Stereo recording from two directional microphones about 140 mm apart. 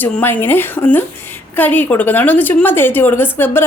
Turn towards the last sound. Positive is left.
turn(degrees=15)  # may be behind; listen again after turning